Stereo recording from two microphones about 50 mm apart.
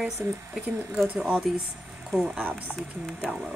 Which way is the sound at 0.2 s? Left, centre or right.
Right.